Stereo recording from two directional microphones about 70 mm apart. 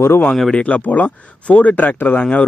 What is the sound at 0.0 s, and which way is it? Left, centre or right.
Speech, left.